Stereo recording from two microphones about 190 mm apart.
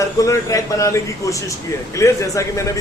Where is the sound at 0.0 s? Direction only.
15° left (ahead or behind).